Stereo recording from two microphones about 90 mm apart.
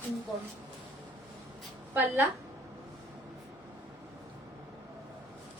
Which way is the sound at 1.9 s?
25° right (ahead or behind).